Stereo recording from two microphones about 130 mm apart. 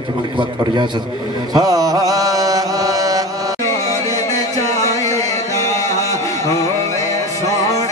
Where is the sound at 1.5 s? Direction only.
30° right (ahead or behind).